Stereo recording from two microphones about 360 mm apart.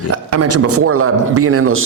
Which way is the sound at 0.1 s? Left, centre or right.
Right.